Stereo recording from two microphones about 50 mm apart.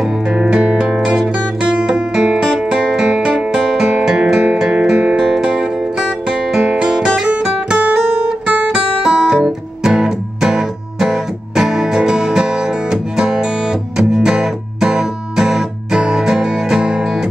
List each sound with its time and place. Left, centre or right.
0.3 s music: centre
7.8 s guitar: centre
8.6 s music: centre